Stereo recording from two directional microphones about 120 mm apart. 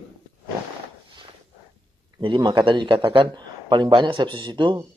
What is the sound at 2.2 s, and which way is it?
A man's voice, 45° right (ahead or behind).